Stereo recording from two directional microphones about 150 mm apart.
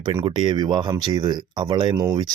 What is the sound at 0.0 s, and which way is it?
Speech, 35° right (ahead or behind).